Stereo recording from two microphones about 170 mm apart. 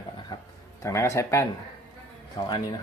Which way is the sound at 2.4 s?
30° left (ahead or behind).